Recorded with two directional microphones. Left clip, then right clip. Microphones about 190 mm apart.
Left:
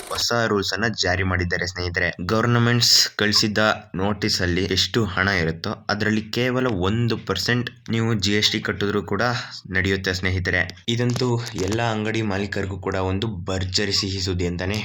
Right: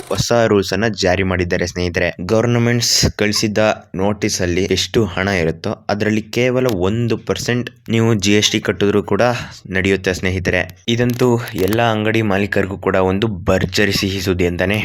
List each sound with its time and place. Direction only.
0.3 s speech: 35° right (ahead or behind)
11.2 s speech: 40° right (ahead or behind)